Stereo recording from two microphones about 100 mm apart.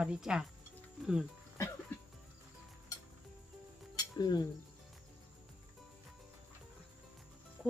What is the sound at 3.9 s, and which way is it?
Music, 40° left (ahead or behind).